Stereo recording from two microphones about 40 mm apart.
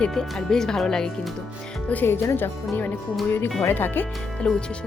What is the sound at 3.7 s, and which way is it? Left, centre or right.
Speech, left.